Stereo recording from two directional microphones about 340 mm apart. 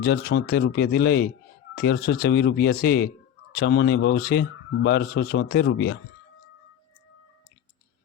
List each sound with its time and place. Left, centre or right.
0.0 s speech: left